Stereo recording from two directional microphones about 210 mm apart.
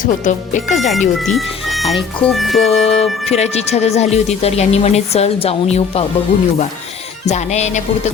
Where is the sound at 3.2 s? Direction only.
30° left (ahead or behind).